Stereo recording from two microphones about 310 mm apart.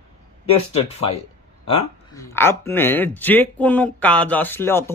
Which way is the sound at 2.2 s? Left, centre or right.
Centre.